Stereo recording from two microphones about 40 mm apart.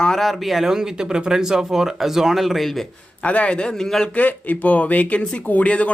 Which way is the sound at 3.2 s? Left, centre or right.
Left.